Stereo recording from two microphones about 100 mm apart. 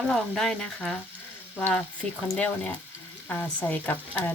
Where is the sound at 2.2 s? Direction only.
5° left (ahead or behind).